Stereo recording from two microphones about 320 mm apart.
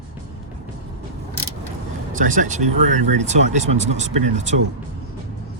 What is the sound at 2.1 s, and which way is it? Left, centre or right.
Speech, right.